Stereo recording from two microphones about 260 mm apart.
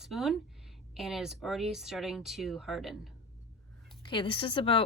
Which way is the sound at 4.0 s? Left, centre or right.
Centre.